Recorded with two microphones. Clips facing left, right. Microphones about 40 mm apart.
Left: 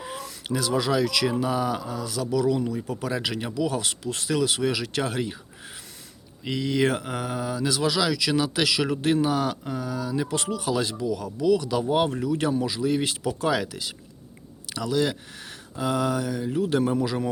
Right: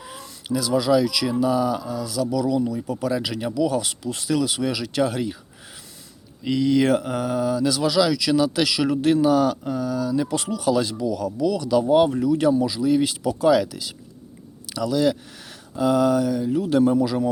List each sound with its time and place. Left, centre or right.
0.4 s speech: left
1.0 s speech: left
1.3 s speech: left
3.5 s speech: left
3.8 s speech: left
6.4 s speech: centre
11.8 s speech: centre